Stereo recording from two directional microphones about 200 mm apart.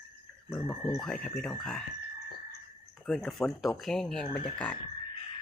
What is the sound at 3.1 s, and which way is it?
Speech, centre (ahead or behind).